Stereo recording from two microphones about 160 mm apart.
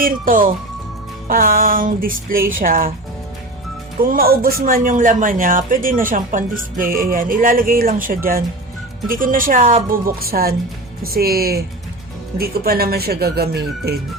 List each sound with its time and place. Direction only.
0.0 s speech: 60° right (ahead or behind)
4.0 s speech: 65° right (ahead or behind)
9.9 s speech: 70° right (ahead or behind); by 14.0 s 90° right